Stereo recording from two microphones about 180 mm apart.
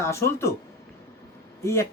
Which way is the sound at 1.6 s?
15° left (ahead or behind).